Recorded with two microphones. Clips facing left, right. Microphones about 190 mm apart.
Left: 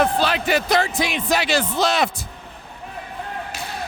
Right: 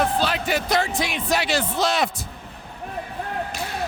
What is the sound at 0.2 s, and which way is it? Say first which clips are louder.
Speech: left 3 dB; 90° left.